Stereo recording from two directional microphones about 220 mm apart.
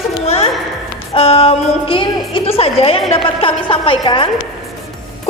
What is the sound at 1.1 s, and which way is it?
A woman's voice, 25° left (ahead or behind).